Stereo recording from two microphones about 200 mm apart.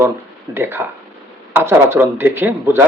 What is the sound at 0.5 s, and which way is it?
A man's voice, 10° right (ahead or behind).